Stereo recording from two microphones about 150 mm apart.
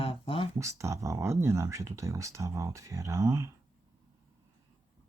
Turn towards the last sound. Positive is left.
turn(degrees=-20)  # may be behind; listen again after turning